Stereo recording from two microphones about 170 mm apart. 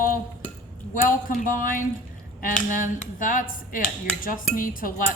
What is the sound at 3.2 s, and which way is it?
Speech, 55° left (ahead or behind).